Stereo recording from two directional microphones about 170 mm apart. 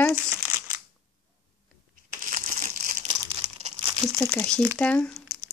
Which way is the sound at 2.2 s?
50° right (ahead or behind).